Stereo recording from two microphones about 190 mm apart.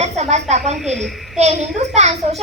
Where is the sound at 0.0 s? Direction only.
35° right (ahead or behind).